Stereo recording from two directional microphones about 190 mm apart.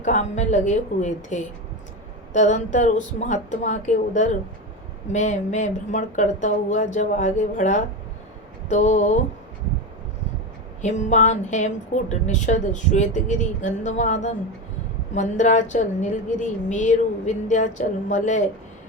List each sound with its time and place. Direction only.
0.0 s a woman's voice: 40° left (ahead or behind)
10.8 s a woman's voice: 40° left (ahead or behind)